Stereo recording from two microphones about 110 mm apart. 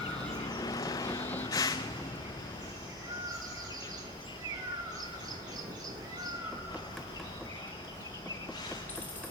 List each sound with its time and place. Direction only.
0.5 s vehicle: 35° left (ahead or behind)